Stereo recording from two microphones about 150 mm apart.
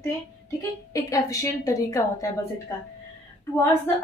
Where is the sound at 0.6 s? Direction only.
20° left (ahead or behind).